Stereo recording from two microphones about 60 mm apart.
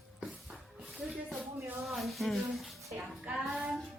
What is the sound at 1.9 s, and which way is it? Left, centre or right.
Child singing, centre.